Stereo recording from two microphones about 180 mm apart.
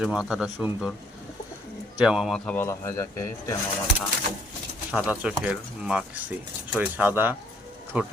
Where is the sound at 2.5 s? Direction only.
15° left (ahead or behind).